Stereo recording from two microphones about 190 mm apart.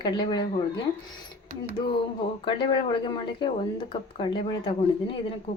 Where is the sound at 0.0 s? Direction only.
25° left (ahead or behind).